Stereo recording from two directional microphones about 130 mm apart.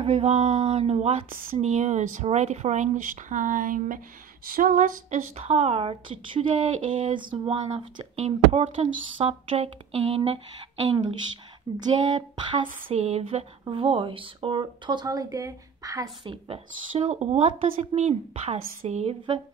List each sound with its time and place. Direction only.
0.0 s speech: 50° right (ahead or behind)
1.3 s speech: 75° right (ahead or behind); by 4.0 s 90° right
4.5 s a sound: 90° right
5.3 s speech: 50° right (ahead or behind); by 12.6 s 35° right (ahead or behind)
12.9 s speech: 55° right (ahead or behind); by 16.1 s 25° right (ahead or behind)
16.3 s speech: 45° right (ahead or behind)
17.0 s speech: 60° right (ahead or behind)
18.6 s speech: 90° right; by 19.1 s 60° right (ahead or behind)